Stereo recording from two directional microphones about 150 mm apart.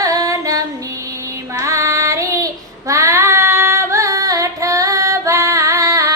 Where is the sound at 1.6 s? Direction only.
20° right (ahead or behind).